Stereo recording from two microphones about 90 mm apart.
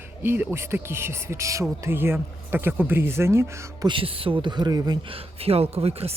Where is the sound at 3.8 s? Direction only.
80° right; by 4.8 s 55° right (ahead or behind).